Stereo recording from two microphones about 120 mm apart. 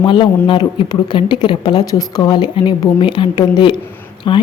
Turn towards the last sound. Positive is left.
turn(degrees=45)  # may be behind; listen again after turning